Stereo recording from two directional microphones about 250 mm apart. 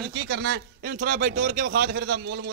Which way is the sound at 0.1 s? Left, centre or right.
Right.